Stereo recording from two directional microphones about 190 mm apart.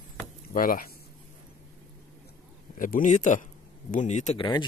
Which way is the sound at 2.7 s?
45° left (ahead or behind).